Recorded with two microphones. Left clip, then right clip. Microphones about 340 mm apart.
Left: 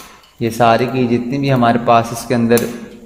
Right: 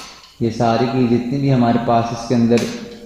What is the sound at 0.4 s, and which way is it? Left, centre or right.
A man's voice, left.